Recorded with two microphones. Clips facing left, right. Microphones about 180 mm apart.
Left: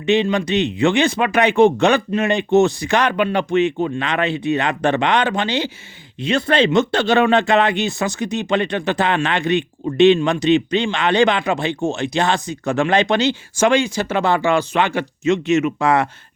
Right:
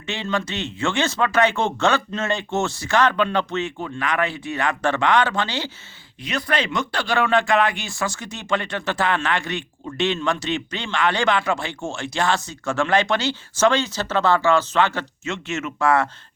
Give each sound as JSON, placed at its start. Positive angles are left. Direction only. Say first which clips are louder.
{"t": 0.0, "sound": "speech", "louder": "left 9 dB", "side_deg": 20}